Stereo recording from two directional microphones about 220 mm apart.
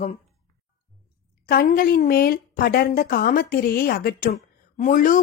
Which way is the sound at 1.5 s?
40° left (ahead or behind).